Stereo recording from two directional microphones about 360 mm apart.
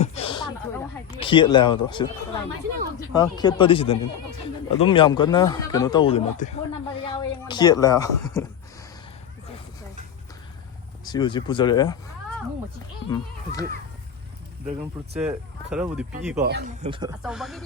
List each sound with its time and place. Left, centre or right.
0.0 s a sound: centre
1.1 s speech: centre
3.1 s a woman's voice: centre
11.0 s speech: centre
13.1 s speech: centre
15.1 s speech: centre
16.4 s speech: right; by 17.6 s centre